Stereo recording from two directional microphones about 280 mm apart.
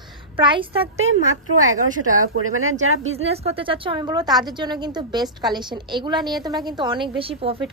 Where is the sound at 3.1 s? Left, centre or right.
Right.